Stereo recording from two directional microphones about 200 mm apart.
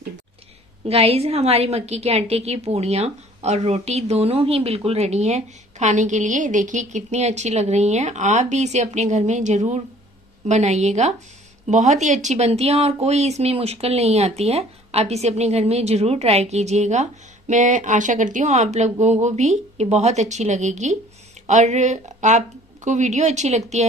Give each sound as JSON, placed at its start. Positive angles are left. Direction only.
{"t": 0.8, "sound": "speech", "side_deg": -30}